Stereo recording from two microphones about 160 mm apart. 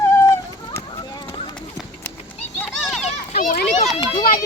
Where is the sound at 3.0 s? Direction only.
50° left (ahead or behind).